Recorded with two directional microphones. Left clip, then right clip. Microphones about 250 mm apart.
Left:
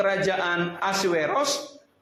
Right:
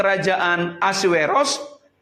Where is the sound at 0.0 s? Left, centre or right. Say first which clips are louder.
Right 5 dB; right.